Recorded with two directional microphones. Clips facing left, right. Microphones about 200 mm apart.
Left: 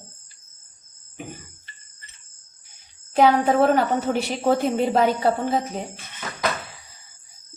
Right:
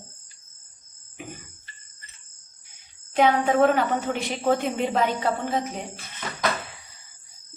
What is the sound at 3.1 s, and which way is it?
A woman's voice, 35° left (ahead or behind).